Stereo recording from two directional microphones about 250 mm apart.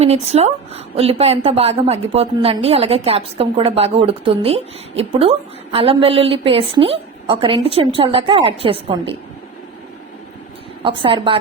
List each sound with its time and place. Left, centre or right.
0.0 s a woman's voice: right
10.8 s a woman's voice: right